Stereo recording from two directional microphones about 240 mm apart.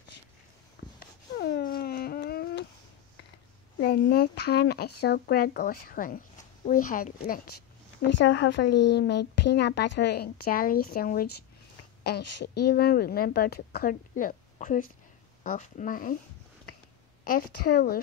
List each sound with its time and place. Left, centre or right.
0.8 s a sound: left
1.3 s cat: left
3.8 s speech: left
8.2 s a woman's voice: left
17.2 s speech: left